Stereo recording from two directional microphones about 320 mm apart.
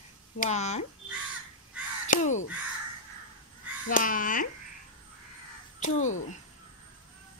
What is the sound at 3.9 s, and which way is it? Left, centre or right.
Speech, left.